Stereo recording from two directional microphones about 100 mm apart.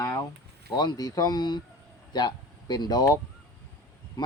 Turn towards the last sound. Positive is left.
turn(degrees=45)  # may be behind; listen again after turning